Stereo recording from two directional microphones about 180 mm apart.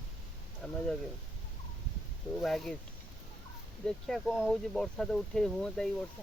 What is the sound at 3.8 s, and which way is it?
Speech, centre (ahead or behind).